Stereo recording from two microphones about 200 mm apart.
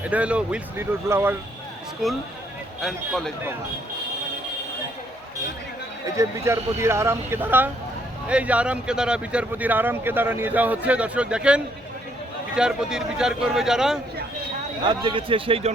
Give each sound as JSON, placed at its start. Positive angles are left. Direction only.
{"t": 0.0, "sound": "speech", "side_deg": -5}
{"t": 2.8, "sound": "speech", "side_deg": 0}
{"t": 6.1, "sound": "speech", "side_deg": -15}
{"t": 14.8, "sound": "speech", "side_deg": -25}